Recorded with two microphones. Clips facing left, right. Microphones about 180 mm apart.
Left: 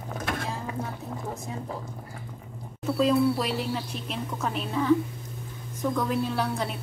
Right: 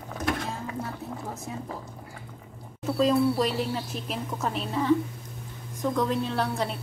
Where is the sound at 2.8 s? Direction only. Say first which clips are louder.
Even; centre (ahead or behind).